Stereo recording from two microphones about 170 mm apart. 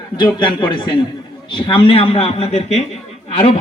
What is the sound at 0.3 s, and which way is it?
A man's voice, 30° left (ahead or behind).